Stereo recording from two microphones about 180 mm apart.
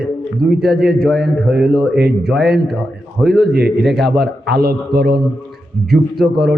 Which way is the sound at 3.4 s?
65° right (ahead or behind).